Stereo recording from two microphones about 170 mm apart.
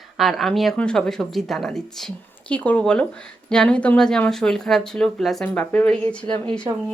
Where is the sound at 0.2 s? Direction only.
Centre (ahead or behind).